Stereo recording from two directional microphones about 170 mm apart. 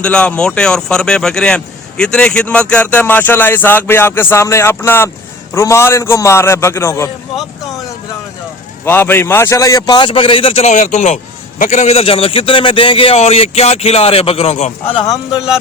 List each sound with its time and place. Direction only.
0.0 s speech: 5° left (ahead or behind)
8.8 s a man's voice: 10° left (ahead or behind)